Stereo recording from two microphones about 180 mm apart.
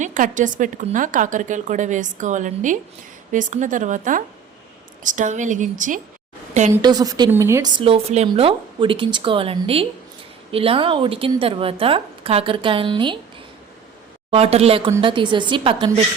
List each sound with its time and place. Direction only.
0.0 s a woman's voice: 45° right (ahead or behind)
6.8 s a woman's voice: 20° right (ahead or behind)
7.8 s a woman's voice: 35° right (ahead or behind)
14.3 s a woman's voice: 35° right (ahead or behind)